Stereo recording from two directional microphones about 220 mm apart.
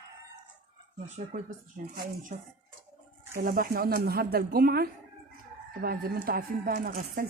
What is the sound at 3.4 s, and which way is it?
Speech, 40° right (ahead or behind).